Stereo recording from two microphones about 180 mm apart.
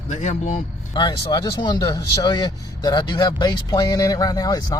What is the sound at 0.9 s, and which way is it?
Speech, 25° left (ahead or behind).